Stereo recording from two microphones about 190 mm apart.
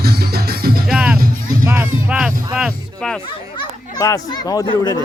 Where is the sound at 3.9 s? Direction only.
20° left (ahead or behind).